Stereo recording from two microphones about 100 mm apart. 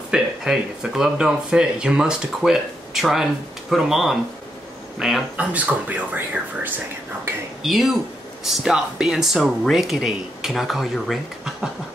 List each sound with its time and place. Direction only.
0.1 s speech: 5° right (ahead or behind)
7.6 s speech: centre (ahead or behind)